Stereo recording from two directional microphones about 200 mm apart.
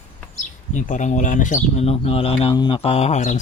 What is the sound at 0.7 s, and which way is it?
Speech, 40° left (ahead or behind).